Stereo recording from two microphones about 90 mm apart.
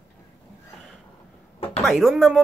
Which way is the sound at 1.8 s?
Centre (ahead or behind).